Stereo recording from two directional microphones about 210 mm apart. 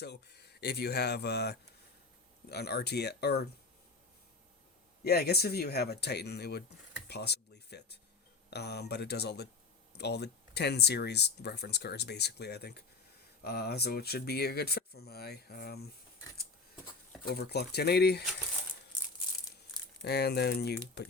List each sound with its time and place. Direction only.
0.0 s speech: 50° left (ahead or behind)
5.0 s speech: 50° left (ahead or behind)
7.1 s a sound: 50° left (ahead or behind)
8.4 s speech: 50° left (ahead or behind)
17.2 s speech: 50° left (ahead or behind)
20.1 s speech: 50° left (ahead or behind)